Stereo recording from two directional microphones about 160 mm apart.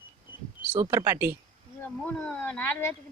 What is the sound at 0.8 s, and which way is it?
Speech, 15° right (ahead or behind).